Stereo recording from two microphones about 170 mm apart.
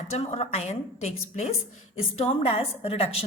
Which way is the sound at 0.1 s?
40° left (ahead or behind).